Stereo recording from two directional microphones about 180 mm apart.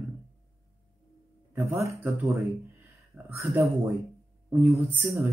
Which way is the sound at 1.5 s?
15° right (ahead or behind).